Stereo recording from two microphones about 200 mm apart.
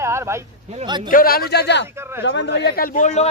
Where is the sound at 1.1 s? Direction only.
45° left (ahead or behind).